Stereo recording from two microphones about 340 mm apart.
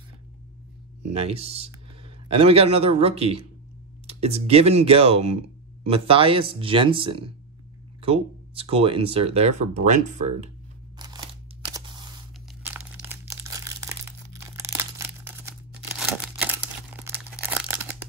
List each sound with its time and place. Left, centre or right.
1.3 s speech: centre
12.6 s crumpling: centre
14.3 s a sound: centre
16.2 s crumpling: centre